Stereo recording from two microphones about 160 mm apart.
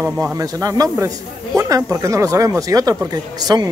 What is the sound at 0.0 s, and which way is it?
Speech, 20° right (ahead or behind).